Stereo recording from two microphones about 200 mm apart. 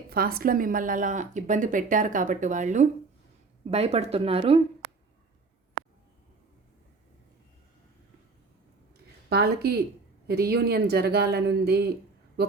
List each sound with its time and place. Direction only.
0.1 s speech: 50° right (ahead or behind); by 4.6 s 30° right (ahead or behind)
9.3 s speech: 50° right (ahead or behind)